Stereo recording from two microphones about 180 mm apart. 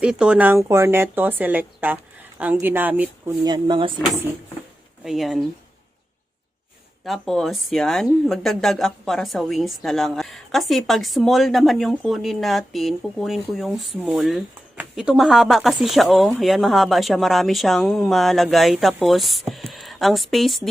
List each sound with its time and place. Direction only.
0.0 s a woman's voice: 5° right (ahead or behind)
3.4 s speech: 25° right (ahead or behind)
5.0 s speech: centre (ahead or behind)
7.0 s a woman's voice: centre (ahead or behind)